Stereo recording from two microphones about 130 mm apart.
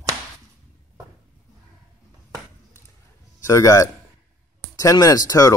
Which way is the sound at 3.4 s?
25° left (ahead or behind).